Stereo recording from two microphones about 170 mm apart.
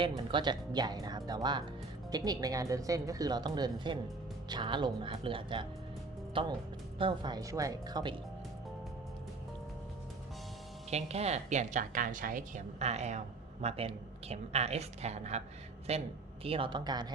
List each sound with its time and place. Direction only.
0.3 s a woman's voice: 25° right (ahead or behind)
10.9 s a woman's voice: 40° right (ahead or behind)